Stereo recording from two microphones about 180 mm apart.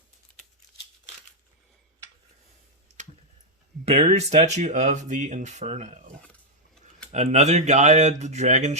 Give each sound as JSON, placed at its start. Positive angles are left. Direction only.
{"t": 3.8, "sound": "speech", "side_deg": -35}
{"t": 7.1, "sound": "speech", "side_deg": -40}